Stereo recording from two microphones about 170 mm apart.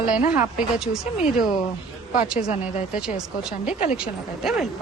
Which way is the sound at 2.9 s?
5° right (ahead or behind).